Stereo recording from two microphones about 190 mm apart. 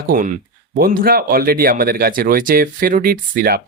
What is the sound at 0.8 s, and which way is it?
Speech, 50° right (ahead or behind).